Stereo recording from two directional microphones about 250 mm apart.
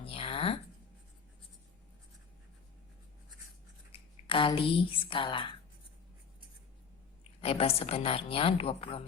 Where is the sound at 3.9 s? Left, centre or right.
Left.